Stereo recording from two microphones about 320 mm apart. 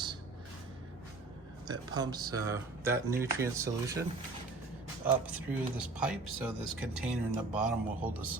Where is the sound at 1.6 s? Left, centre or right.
Centre.